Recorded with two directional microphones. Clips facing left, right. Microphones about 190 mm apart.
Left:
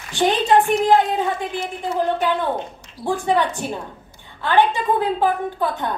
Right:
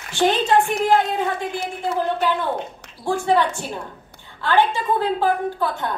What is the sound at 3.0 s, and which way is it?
A woman's voice, 15° left (ahead or behind).